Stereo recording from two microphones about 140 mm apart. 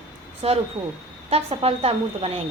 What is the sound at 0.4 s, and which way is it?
A woman's voice, 45° right (ahead or behind).